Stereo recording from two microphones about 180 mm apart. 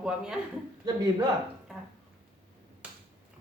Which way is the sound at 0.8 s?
20° right (ahead or behind).